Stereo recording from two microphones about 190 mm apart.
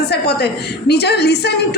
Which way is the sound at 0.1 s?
60° left (ahead or behind).